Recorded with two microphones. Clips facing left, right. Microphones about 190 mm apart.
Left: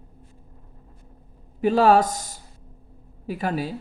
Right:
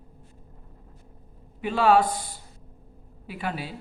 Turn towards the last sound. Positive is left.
turn(degrees=40)  # may be behind; listen again after turning